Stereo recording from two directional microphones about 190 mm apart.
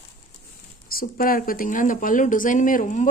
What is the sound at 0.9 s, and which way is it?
A woman's voice, 50° left (ahead or behind).